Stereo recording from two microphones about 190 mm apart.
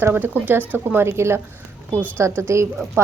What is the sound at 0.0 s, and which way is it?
A woman's voice, 10° right (ahead or behind).